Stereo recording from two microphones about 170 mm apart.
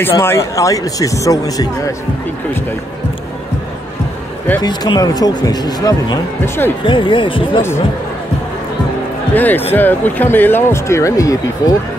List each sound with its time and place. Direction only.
0.2 s speech: 15° left (ahead or behind)
4.6 s speech: 25° left (ahead or behind)
6.8 s speech: 30° left (ahead or behind)
9.3 s speech: 10° left (ahead or behind)